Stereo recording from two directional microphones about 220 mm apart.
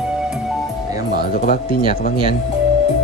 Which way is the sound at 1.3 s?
40° left (ahead or behind).